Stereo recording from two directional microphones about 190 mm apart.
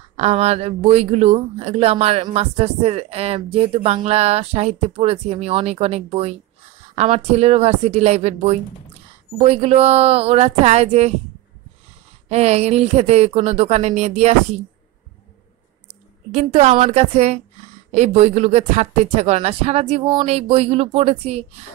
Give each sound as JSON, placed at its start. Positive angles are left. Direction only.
{"t": 0.2, "sound": "speech", "side_deg": -35}
{"t": 12.3, "sound": "speech", "side_deg": -35}
{"t": 16.3, "sound": "speech", "side_deg": -35}